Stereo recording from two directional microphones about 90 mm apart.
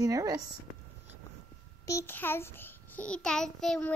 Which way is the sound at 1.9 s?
35° left (ahead or behind).